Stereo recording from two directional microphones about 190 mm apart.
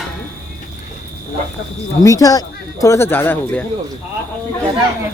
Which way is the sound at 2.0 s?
20° left (ahead or behind).